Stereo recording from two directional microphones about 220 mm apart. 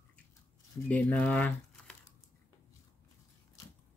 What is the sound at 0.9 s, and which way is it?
Speech, 5° left (ahead or behind).